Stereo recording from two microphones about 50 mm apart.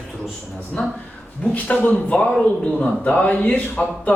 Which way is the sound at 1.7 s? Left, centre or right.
Centre.